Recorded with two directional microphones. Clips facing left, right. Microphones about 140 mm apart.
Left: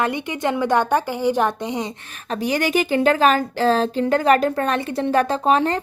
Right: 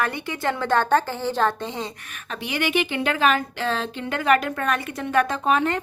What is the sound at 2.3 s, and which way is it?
A woman's voice, 40° left (ahead or behind).